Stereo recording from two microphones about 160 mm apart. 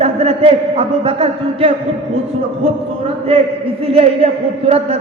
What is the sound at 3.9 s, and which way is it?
A man's voice, 40° right (ahead or behind).